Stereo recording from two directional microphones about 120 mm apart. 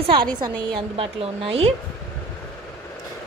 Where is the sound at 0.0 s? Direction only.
40° right (ahead or behind).